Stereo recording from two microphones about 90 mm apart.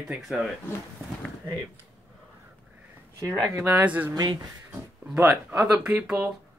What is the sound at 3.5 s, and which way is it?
Speech, 25° right (ahead or behind).